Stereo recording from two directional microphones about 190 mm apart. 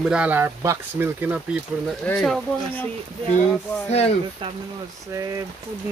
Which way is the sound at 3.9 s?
35° left (ahead or behind).